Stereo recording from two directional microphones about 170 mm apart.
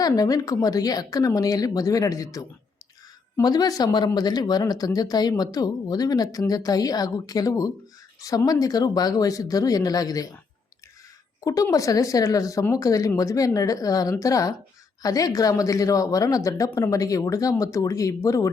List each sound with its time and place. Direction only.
0.0 s speech: 20° left (ahead or behind)
11.3 s speech: 20° left (ahead or behind)